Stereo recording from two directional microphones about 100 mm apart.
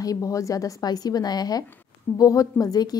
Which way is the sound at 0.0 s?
35° left (ahead or behind).